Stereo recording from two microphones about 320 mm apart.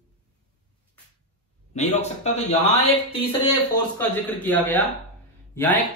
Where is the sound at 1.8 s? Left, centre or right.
Left.